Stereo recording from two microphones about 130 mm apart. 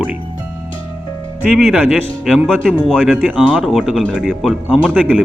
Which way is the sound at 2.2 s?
5° left (ahead or behind).